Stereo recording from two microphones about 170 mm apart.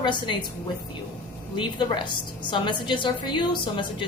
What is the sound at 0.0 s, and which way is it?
Speech, 30° left (ahead or behind).